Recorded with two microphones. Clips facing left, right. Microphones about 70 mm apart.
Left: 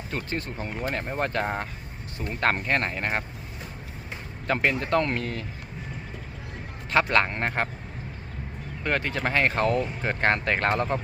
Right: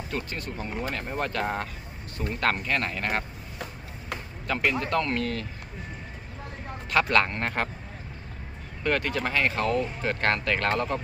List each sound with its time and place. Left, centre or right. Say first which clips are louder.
0.1 s speech: left 4 dB; left
4.4 s speech: left 2 dB; left
6.9 s speech: left 1 dB; left
8.8 s speech: right 1 dB; centre
9.2 s speech: left 2 dB; left
10.0 s speech: left 2 dB; left